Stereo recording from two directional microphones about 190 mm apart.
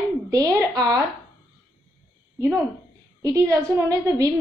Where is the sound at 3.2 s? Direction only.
15° right (ahead or behind).